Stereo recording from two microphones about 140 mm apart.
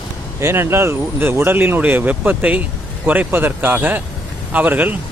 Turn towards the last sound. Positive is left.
turn(degrees=-10)  # may be behind; listen again after turning